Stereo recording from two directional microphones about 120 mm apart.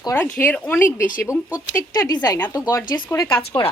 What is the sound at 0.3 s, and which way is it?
Speech, 15° left (ahead or behind).